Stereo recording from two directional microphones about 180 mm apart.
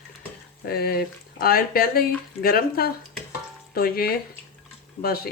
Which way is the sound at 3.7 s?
55° left (ahead or behind).